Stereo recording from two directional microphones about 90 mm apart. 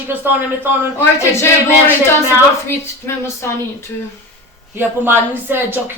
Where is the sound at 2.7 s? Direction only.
30° left (ahead or behind).